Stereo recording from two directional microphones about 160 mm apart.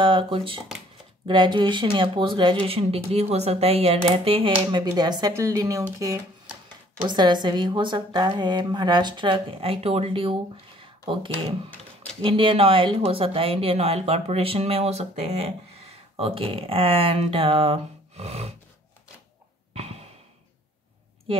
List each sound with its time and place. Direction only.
0.0 s a woman's voice: 35° right (ahead or behind)
19.7 s sigh: 40° right (ahead or behind)